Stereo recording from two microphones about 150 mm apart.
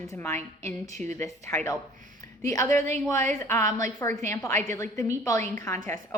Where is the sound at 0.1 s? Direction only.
20° left (ahead or behind).